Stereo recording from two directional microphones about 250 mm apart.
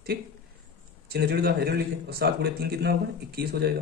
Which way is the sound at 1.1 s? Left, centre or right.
Right.